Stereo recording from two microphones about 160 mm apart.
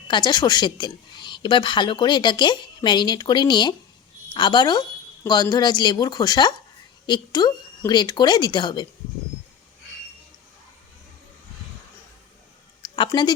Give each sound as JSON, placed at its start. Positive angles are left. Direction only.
{"t": 0.1, "sound": "a woman's voice", "side_deg": 25}
{"t": 13.1, "sound": "a woman's voice", "side_deg": 25}